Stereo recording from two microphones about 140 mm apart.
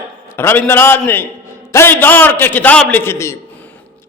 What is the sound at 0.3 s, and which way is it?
A man's voice, 15° left (ahead or behind).